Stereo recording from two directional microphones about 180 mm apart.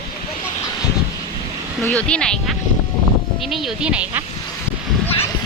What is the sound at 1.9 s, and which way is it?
Speech, 5° left (ahead or behind).